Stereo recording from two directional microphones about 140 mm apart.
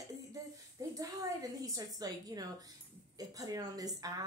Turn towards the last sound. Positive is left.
turn(degrees=-25)  # may be behind; listen again after turning